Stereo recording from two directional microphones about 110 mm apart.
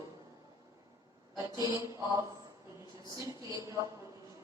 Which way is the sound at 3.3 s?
25° right (ahead or behind).